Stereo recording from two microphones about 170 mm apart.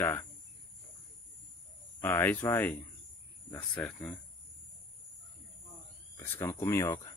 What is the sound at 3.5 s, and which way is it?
Speech, 10° left (ahead or behind).